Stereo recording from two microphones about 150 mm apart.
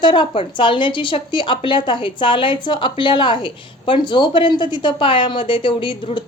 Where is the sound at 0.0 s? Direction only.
30° left (ahead or behind).